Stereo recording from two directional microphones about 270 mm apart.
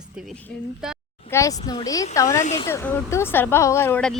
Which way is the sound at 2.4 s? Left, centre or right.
Left.